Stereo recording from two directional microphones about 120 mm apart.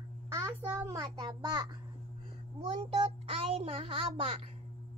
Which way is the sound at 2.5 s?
60° right (ahead or behind).